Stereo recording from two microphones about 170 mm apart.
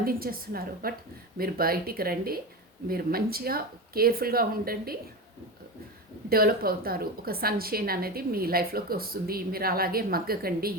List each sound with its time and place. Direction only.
0.0 s a woman's voice: 60° right (ahead or behind)
6.2 s a woman's voice: 60° right (ahead or behind)